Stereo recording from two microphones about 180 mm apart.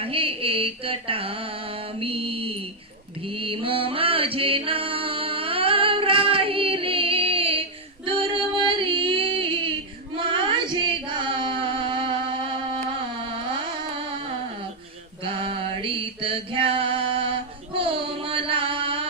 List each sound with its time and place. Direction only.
0.0 s a sound: 30° right (ahead or behind)
2.0 s mantra: 30° right (ahead or behind)
3.2 s music: 30° right (ahead or behind)
8.0 s female singing: 30° right (ahead or behind)
10.2 s a sound: 25° right (ahead or behind)
15.2 s mantra: 30° right (ahead or behind)